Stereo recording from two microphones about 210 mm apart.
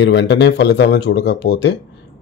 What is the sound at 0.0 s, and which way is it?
Speech, 55° left (ahead or behind).